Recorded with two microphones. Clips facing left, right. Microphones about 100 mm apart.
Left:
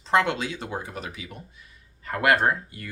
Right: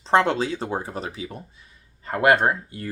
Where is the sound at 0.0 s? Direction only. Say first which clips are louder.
Right 3 dB; 30° right (ahead or behind).